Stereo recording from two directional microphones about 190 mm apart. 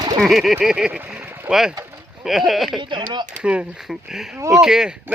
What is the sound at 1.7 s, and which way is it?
Rowboat, 10° right (ahead or behind).